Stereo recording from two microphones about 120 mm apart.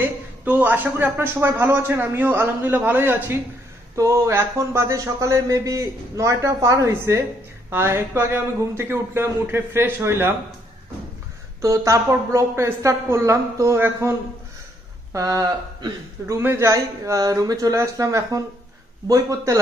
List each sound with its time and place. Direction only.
0.0 s speech: 15° right (ahead or behind)
11.6 s speech: 25° right (ahead or behind)
15.1 s speech: 25° right (ahead or behind)